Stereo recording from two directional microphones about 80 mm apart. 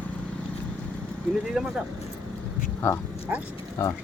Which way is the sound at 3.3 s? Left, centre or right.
Right.